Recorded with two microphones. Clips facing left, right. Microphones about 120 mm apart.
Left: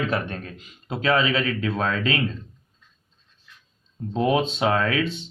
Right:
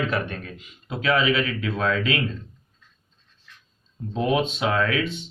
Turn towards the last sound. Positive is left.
turn(degrees=30)  # may be behind; listen again after turning